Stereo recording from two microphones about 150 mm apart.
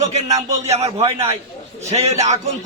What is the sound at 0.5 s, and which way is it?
Speech, 45° right (ahead or behind).